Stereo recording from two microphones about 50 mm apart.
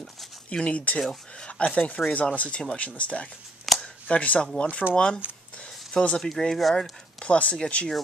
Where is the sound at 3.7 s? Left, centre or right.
Centre.